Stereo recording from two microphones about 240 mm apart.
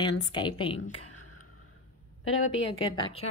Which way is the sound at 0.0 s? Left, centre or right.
Centre.